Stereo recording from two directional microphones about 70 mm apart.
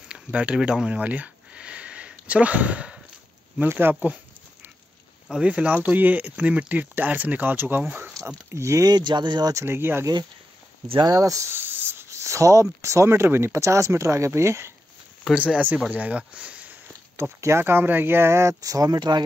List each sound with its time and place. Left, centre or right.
0.1 s a sound: centre
3.6 s speech: right
5.4 s speech: centre
8.5 s speech: right
8.8 s speech: right
9.5 s speech: right
11.0 s speech: right
11.5 s cricket: right
12.8 s speech: right
15.3 s speech: centre
17.2 s speech: right
18.6 s speech: right